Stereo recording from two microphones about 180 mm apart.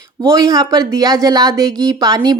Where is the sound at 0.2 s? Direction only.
20° right (ahead or behind).